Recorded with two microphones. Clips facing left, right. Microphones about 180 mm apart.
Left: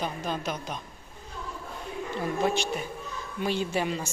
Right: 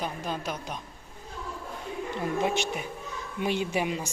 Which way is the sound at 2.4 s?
15° right (ahead or behind).